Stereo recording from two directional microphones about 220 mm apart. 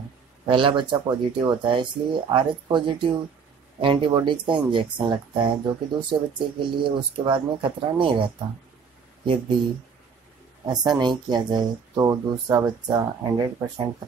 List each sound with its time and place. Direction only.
0.5 s speech: 20° right (ahead or behind)
10.7 s speech: 20° right (ahead or behind)